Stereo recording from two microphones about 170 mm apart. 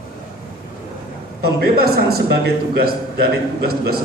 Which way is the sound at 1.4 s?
65° right (ahead or behind).